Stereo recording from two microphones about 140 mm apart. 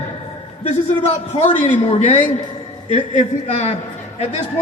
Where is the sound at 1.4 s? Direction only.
60° left (ahead or behind).